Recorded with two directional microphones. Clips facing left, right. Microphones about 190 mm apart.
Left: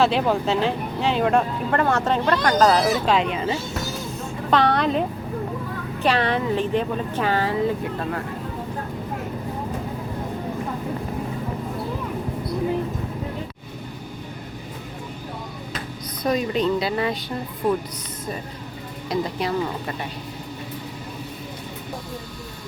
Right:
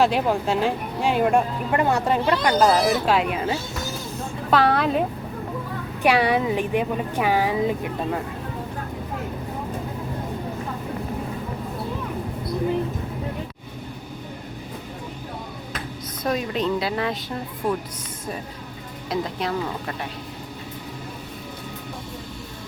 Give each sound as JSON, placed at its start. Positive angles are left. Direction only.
{"t": 0.0, "sound": "a woman's voice", "side_deg": -10}
{"t": 16.2, "sound": "a woman's voice", "side_deg": 0}
{"t": 19.1, "sound": "a woman's voice", "side_deg": 0}